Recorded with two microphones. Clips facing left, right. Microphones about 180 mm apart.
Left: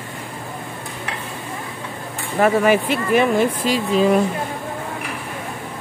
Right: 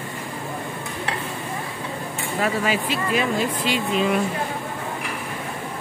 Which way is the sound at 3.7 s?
35° left (ahead or behind).